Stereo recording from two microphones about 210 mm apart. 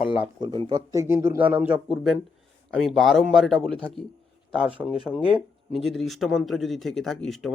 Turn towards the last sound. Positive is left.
turn(degrees=0)  # may be behind; listen again after turning